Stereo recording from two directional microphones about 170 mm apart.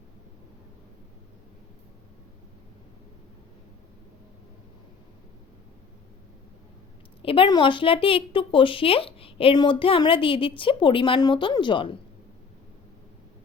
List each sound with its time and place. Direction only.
7.2 s a woman's voice: 30° left (ahead or behind)